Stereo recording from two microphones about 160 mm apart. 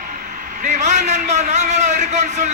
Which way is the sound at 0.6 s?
45° right (ahead or behind).